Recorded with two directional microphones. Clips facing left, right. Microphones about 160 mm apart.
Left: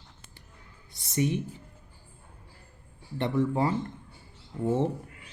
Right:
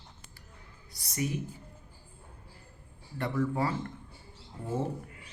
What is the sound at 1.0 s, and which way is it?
Speech, 25° left (ahead or behind).